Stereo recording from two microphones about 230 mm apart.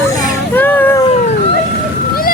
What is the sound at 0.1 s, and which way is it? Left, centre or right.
Vehicle, centre.